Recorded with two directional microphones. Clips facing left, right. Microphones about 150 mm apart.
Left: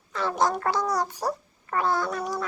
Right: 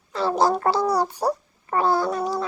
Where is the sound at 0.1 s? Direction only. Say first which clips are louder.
Right 5 dB; 30° right (ahead or behind).